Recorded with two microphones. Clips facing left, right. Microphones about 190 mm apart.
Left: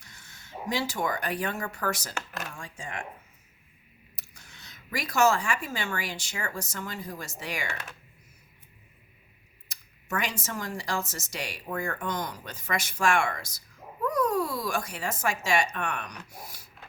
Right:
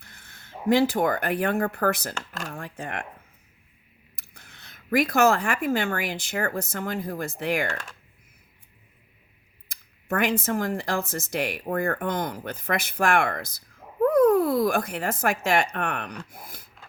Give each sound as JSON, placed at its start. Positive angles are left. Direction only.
{"t": 0.0, "sound": "speech", "side_deg": -55}
{"t": 4.2, "sound": "speech", "side_deg": -55}
{"t": 9.6, "sound": "speech", "side_deg": -55}